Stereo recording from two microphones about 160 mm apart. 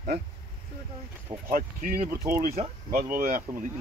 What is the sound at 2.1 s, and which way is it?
Speech, 15° right (ahead or behind).